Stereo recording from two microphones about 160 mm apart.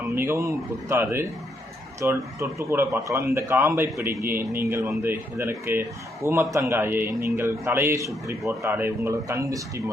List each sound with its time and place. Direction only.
0.2 s a man's voice: 20° right (ahead or behind)